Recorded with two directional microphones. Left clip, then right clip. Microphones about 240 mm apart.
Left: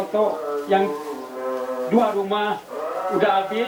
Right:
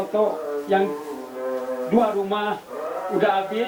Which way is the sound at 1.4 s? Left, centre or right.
Centre.